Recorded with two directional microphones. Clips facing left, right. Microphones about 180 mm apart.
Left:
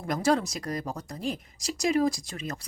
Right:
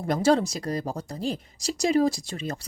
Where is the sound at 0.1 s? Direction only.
30° right (ahead or behind).